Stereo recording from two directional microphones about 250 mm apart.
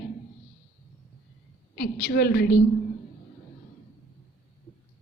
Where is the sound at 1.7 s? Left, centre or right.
Left.